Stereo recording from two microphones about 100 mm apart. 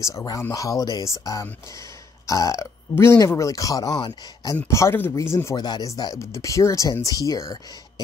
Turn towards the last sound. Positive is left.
turn(degrees=35)  # may be behind; listen again after turning